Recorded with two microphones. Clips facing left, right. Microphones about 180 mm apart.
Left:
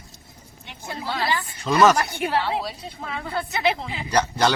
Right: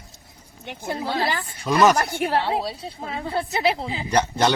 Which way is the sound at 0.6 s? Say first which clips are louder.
Right 7 dB; 55° right (ahead or behind).